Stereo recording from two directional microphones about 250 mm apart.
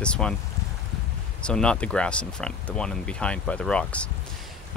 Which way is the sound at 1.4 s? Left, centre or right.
Centre.